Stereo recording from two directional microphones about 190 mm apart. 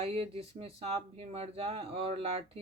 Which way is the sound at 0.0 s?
30° right (ahead or behind).